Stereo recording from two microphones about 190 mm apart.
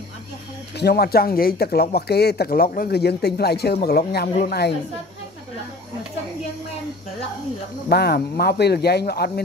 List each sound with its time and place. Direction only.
0.7 s speech: 55° left (ahead or behind)
7.9 s speech: 55° left (ahead or behind)